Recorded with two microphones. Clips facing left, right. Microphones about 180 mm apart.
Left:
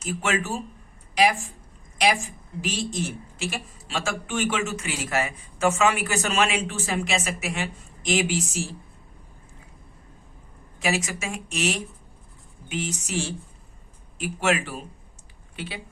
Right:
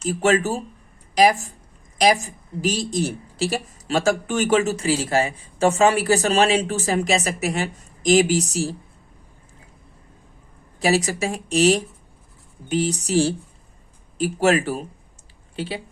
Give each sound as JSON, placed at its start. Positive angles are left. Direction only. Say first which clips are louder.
{"t": 0.0, "sound": "a woman's voice", "louder": "right 8 dB", "side_deg": -35}
{"t": 10.8, "sound": "a woman's voice", "louder": "right 7 dB", "side_deg": -35}